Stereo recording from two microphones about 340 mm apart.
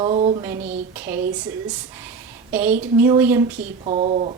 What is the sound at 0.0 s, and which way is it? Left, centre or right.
Speech, centre.